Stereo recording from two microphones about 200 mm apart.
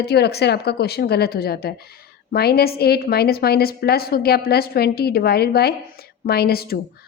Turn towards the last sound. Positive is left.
turn(degrees=50)  # may be behind; listen again after turning